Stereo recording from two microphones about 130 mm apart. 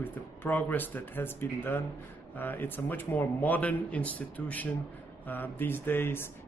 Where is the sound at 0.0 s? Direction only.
15° left (ahead or behind).